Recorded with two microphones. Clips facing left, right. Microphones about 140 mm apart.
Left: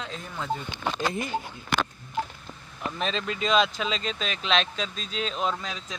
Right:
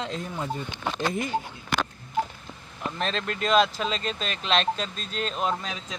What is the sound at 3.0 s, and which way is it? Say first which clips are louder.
Speech: even; centre (ahead or behind).